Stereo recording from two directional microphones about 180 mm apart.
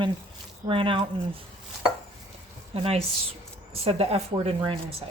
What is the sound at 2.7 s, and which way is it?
Speech, 35° right (ahead or behind).